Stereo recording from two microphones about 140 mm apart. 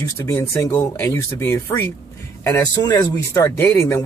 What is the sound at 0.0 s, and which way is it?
Speech, 20° left (ahead or behind).